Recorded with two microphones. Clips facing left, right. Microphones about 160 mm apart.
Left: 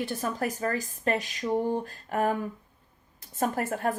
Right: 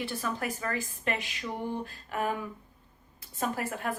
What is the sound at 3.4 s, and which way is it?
Speech, 45° left (ahead or behind).